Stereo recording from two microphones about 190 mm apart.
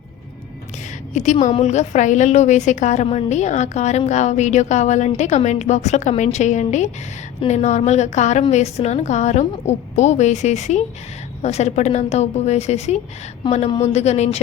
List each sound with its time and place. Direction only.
1.1 s a woman's voice: 40° left (ahead or behind)